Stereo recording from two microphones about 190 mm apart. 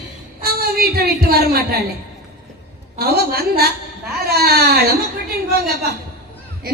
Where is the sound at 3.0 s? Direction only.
55° right (ahead or behind).